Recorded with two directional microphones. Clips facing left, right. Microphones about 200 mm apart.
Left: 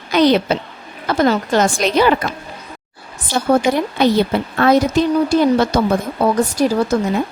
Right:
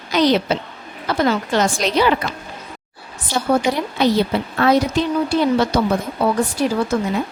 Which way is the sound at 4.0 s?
50° left (ahead or behind).